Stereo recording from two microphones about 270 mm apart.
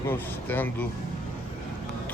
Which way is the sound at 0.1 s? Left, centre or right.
Centre.